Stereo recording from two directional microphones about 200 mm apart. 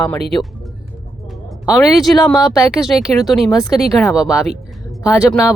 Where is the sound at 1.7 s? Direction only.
Centre (ahead or behind).